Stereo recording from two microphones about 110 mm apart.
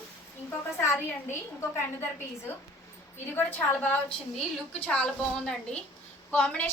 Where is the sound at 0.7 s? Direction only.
20° left (ahead or behind).